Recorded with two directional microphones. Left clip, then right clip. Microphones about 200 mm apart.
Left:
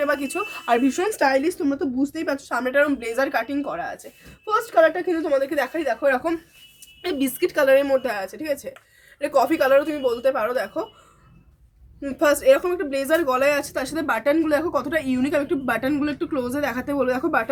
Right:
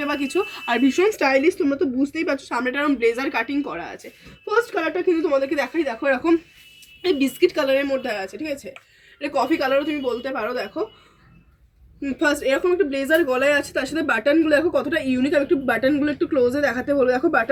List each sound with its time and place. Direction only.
0.0 s speech: 25° left (ahead or behind); by 10.8 s 50° left (ahead or behind)
12.0 s speech: 40° left (ahead or behind)